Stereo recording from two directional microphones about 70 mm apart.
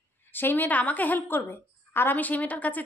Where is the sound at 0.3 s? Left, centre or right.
Left.